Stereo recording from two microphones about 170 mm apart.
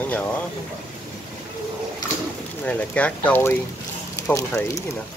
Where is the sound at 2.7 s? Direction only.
10° left (ahead or behind).